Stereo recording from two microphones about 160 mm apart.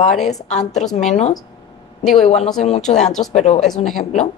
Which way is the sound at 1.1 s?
45° left (ahead or behind).